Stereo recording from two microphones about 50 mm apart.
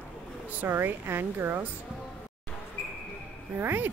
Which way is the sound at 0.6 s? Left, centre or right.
Right.